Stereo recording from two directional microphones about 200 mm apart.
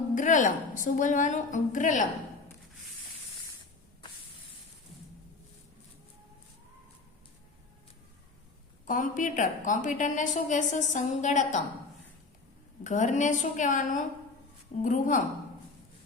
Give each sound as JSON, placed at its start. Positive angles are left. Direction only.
{"t": 0.1, "sound": "a woman's voice", "side_deg": 40}
{"t": 8.9, "sound": "a woman's voice", "side_deg": 40}
{"t": 12.8, "sound": "a woman's voice", "side_deg": 40}